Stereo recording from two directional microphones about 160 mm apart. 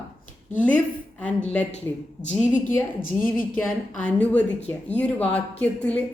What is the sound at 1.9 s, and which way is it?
A woman's voice, 20° left (ahead or behind).